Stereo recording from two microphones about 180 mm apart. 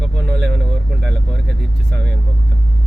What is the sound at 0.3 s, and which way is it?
Vehicle, 65° right (ahead or behind).